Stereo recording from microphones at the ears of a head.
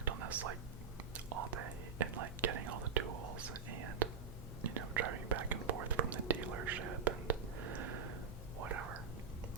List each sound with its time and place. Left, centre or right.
0.0 s whispering: right